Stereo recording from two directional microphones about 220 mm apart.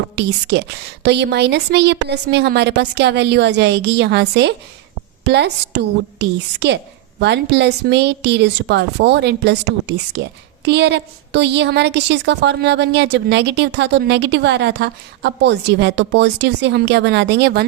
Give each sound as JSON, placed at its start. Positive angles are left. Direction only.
{"t": 0.2, "sound": "a woman's voice", "side_deg": -50}